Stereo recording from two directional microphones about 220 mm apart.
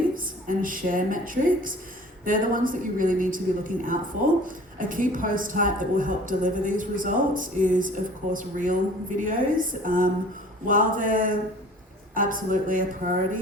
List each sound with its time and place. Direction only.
0.1 s a woman's voice: 40° right (ahead or behind)